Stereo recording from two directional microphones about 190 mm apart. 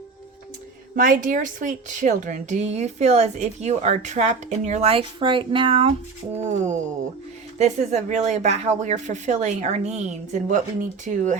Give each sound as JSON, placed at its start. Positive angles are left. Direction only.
{"t": 0.9, "sound": "speech", "side_deg": -45}
{"t": 6.3, "sound": "speech", "side_deg": -35}